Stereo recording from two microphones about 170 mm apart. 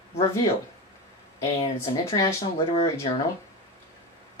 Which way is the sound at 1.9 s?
20° left (ahead or behind).